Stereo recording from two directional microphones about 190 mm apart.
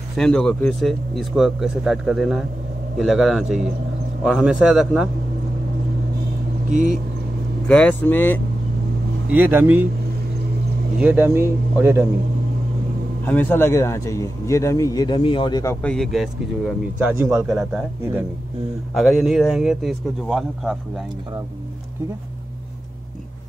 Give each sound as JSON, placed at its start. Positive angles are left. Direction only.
{"t": 0.2, "sound": "speech", "side_deg": 5}
{"t": 6.7, "sound": "speech", "side_deg": -40}
{"t": 7.6, "sound": "speech", "side_deg": 5}
{"t": 9.3, "sound": "speech", "side_deg": -10}
{"t": 11.0, "sound": "speech", "side_deg": -10}
{"t": 13.2, "sound": "speech", "side_deg": 10}
{"t": 17.2, "sound": "speech", "side_deg": -15}
{"t": 17.5, "sound": "speech", "side_deg": 0}
{"t": 18.9, "sound": "speech", "side_deg": 0}